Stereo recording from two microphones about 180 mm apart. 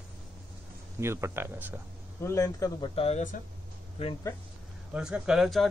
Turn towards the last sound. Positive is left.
turn(degrees=0)  # may be behind; listen again after turning